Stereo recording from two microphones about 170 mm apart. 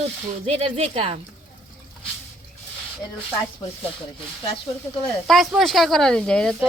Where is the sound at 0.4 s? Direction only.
35° right (ahead or behind).